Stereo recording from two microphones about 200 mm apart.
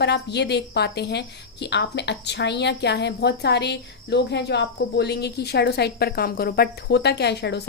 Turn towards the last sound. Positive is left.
turn(degrees=55)  # may be behind; listen again after turning